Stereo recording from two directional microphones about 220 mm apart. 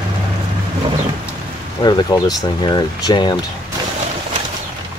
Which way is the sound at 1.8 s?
15° left (ahead or behind).